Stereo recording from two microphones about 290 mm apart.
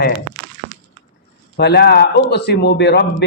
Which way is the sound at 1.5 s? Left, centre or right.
Left.